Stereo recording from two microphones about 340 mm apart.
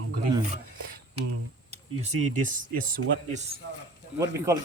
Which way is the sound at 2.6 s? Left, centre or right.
Right.